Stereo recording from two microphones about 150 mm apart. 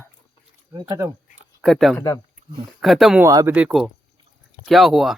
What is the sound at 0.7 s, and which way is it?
Speech, 25° right (ahead or behind).